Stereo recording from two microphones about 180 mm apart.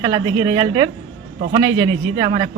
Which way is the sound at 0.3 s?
25° right (ahead or behind).